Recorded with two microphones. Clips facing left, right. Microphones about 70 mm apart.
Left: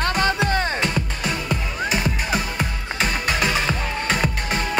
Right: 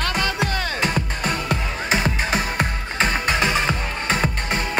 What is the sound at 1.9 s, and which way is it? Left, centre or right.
Music, right.